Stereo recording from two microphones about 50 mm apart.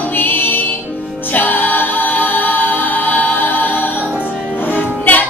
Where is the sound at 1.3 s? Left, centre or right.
Left.